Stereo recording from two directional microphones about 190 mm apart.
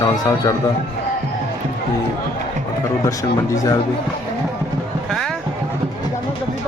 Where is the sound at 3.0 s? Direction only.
20° left (ahead or behind).